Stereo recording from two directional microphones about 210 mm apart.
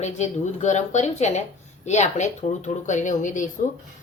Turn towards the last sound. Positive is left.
turn(degrees=35)  # may be behind; listen again after turning